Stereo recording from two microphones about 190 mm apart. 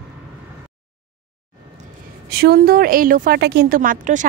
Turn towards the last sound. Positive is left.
turn(degrees=-45)  # may be behind; listen again after turning